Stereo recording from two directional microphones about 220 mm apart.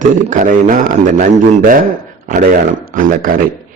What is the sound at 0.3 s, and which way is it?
A man's voice, 35° right (ahead or behind).